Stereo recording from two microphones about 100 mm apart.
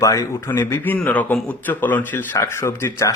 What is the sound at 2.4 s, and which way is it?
Speech, 30° left (ahead or behind).